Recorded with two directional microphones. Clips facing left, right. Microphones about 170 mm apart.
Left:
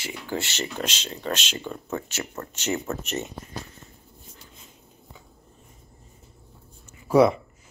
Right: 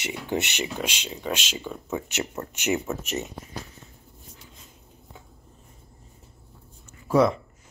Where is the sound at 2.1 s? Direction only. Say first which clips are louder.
Right 3 dB; 20° right (ahead or behind).